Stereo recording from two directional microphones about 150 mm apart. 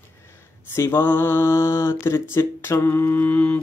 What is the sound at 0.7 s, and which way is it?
Mantra, 15° left (ahead or behind).